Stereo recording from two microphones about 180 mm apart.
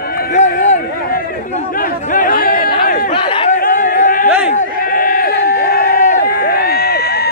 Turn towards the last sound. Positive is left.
turn(degrees=60)  # may be behind; listen again after turning